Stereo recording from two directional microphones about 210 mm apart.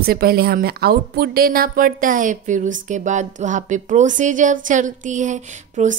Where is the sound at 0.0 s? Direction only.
45° right (ahead or behind).